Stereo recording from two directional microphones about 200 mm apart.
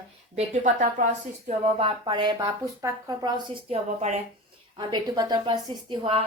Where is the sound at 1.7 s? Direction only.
25° right (ahead or behind).